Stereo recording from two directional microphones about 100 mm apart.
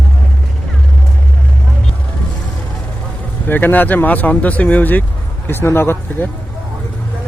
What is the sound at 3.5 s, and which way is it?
Speech, 20° left (ahead or behind).